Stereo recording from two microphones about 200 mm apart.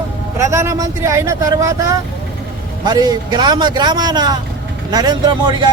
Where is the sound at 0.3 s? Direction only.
15° right (ahead or behind).